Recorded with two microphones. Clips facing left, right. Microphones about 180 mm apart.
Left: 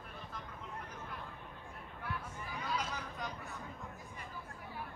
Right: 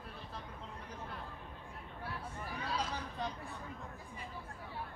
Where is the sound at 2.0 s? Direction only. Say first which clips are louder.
Even; 30° right (ahead or behind).